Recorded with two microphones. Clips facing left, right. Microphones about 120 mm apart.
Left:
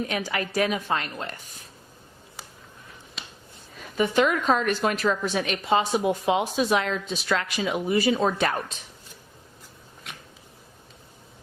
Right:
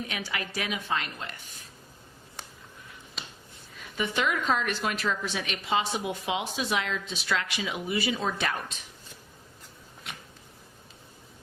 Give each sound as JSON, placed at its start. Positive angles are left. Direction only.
{"t": 0.1, "sound": "a woman's voice", "side_deg": 40}
{"t": 3.9, "sound": "a woman's voice", "side_deg": 40}